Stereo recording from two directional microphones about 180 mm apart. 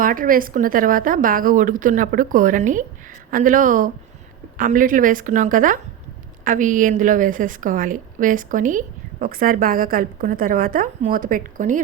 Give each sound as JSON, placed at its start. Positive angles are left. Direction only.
{"t": 0.0, "sound": "a woman's voice", "side_deg": -50}